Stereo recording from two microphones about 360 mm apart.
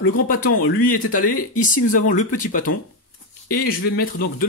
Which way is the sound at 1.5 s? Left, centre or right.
Left.